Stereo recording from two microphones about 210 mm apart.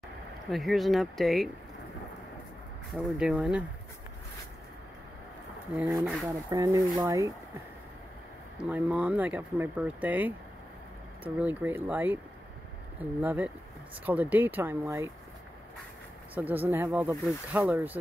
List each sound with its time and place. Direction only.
0.5 s speech: centre (ahead or behind)
2.9 s speech: 5° right (ahead or behind)
5.7 s speech: 5° right (ahead or behind)
8.5 s speech: 5° right (ahead or behind)
13.2 s speech: 5° right (ahead or behind)
16.3 s speech: 10° right (ahead or behind)